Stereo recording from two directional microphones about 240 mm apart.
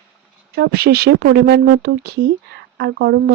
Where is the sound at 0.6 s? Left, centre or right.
Right.